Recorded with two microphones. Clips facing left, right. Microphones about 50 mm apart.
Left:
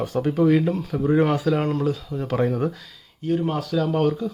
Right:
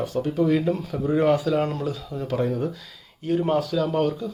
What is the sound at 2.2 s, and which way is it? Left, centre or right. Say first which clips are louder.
Speech: left 2 dB; left.